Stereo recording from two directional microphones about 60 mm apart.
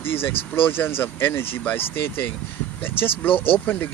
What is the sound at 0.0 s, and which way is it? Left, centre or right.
Speech, left.